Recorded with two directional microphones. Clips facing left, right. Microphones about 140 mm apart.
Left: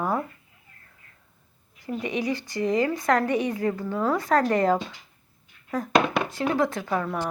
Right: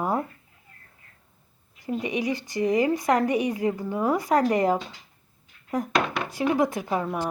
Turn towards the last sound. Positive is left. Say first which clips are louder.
# even
turn(degrees=-10)  # may be behind; listen again after turning